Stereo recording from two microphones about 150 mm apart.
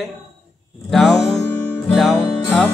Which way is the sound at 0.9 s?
Centre (ahead or behind).